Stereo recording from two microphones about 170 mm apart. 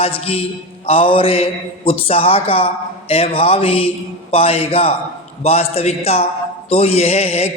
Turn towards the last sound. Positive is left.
turn(degrees=35)  # may be behind; listen again after turning